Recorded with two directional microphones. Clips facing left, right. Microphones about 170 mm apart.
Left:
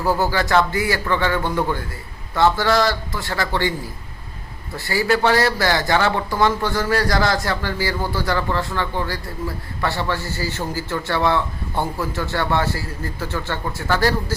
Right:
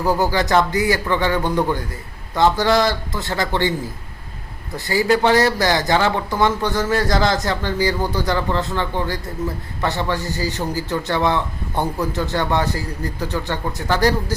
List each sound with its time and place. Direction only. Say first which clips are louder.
0.0 s speech: right 1 dB; 15° right (ahead or behind)